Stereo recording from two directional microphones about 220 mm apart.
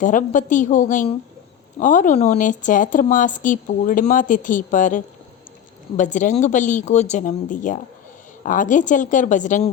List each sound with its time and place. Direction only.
0.0 s speech: 35° left (ahead or behind)